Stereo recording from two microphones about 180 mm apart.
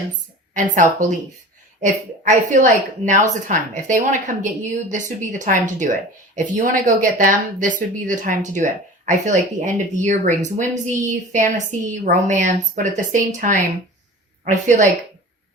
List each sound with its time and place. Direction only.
0.5 s a woman's voice: 45° right (ahead or behind)